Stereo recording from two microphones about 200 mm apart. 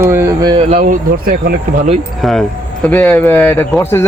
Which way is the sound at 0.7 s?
35° right (ahead or behind).